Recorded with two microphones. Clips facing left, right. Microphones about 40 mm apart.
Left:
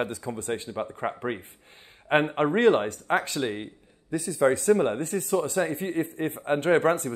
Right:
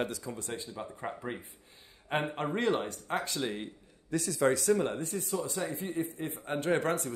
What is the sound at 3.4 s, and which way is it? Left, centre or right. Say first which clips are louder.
Speech: left 5 dB; left.